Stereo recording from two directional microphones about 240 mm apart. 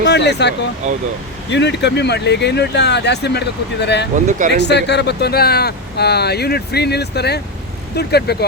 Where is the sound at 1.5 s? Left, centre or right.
Left.